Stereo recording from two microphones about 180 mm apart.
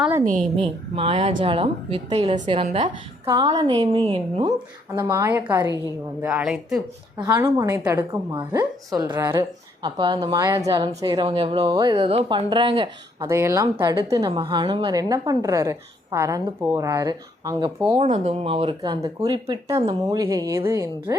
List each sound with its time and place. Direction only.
0.5 s a woman's voice: 30° right (ahead or behind)
2.6 s speech: 40° right (ahead or behind)
3.3 s a woman's voice: 25° right (ahead or behind)
4.9 s speech: 15° right (ahead or behind)
6.2 s a woman's voice: 5° right (ahead or behind)
7.2 s a woman's voice: 20° right (ahead or behind)
9.8 s a woman's voice: 25° right (ahead or behind)
13.2 s speech: 15° right (ahead or behind)
14.3 s a woman's voice: 30° right (ahead or behind)
18.0 s a woman's voice: 40° right (ahead or behind); by 21.2 s 15° right (ahead or behind)